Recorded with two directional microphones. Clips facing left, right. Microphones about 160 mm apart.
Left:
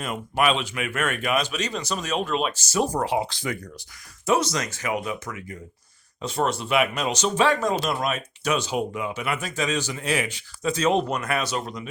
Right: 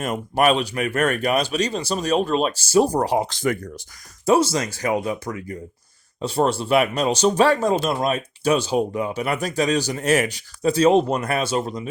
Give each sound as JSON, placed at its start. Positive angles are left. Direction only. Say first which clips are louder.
{"t": 0.0, "sound": "speech", "louder": "right 4 dB", "side_deg": -45}
{"t": 4.3, "sound": "speech", "louder": "right 5 dB", "side_deg": -30}